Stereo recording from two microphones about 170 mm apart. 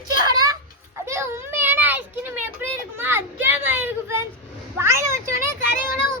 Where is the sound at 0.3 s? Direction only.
20° right (ahead or behind).